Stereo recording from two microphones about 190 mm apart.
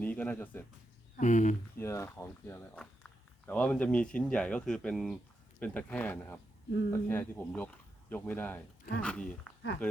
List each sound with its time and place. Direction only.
0.0 s speech: 10° left (ahead or behind)
1.2 s speech: 40° left (ahead or behind)
1.8 s speech: 15° left (ahead or behind)